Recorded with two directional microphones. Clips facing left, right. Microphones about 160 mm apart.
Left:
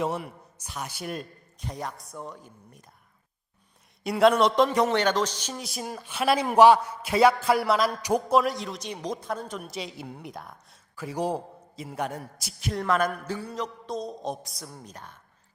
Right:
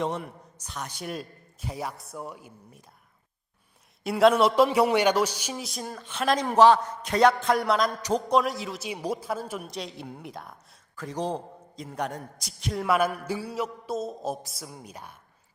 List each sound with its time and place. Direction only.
0.0 s a man's voice: 5° left (ahead or behind)
4.0 s a man's voice: centre (ahead or behind)
5.6 s a man's voice: 5° left (ahead or behind)
12.8 s a man's voice: 10° right (ahead or behind)